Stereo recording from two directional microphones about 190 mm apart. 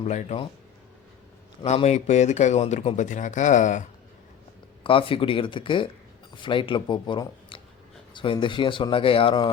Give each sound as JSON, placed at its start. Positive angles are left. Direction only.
{"t": 0.0, "sound": "speech", "side_deg": 35}
{"t": 1.6, "sound": "speech", "side_deg": 35}
{"t": 4.8, "sound": "speech", "side_deg": 30}